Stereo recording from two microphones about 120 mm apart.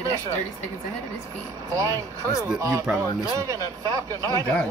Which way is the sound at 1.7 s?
30° right (ahead or behind).